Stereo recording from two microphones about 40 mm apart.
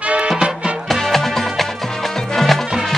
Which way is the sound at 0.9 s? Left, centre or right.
Centre.